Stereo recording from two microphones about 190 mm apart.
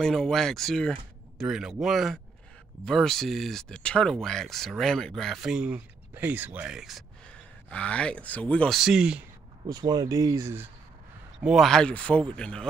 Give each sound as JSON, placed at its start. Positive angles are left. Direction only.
{"t": 0.0, "sound": "speech", "side_deg": 0}
{"t": 9.7, "sound": "speech", "side_deg": -20}
{"t": 11.3, "sound": "speech", "side_deg": 0}